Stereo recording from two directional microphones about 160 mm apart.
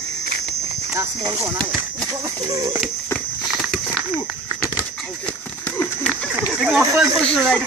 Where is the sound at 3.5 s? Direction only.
5° right (ahead or behind).